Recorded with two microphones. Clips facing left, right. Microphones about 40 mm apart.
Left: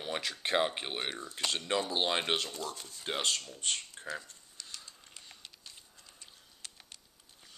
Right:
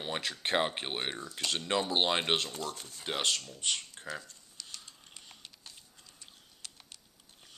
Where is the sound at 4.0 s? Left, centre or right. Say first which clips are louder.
Even; right.